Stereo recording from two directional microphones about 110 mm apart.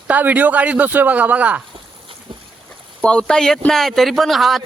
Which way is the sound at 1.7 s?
55° right (ahead or behind).